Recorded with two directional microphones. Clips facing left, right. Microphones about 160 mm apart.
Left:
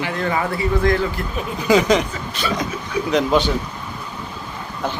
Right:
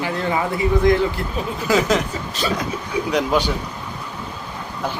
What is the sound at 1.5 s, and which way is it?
Speech, centre (ahead or behind).